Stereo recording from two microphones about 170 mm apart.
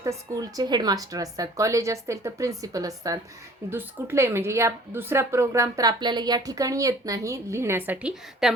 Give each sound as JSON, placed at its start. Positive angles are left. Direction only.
{"t": 0.0, "sound": "speech", "side_deg": -20}